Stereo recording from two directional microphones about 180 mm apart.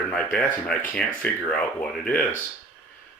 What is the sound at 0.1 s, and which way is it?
Speech, 5° left (ahead or behind).